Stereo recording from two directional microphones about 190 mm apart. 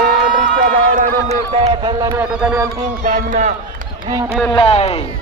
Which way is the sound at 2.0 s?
10° right (ahead or behind).